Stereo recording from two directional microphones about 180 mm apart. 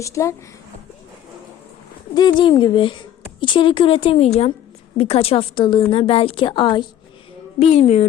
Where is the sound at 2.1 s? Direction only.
25° left (ahead or behind).